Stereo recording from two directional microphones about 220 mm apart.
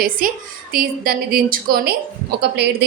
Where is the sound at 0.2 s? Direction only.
40° right (ahead or behind).